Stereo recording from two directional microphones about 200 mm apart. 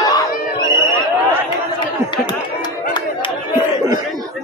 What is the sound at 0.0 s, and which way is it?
Chatter, 20° left (ahead or behind).